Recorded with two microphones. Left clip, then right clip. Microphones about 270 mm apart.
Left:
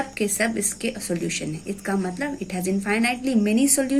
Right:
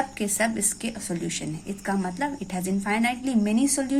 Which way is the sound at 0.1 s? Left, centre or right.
Centre.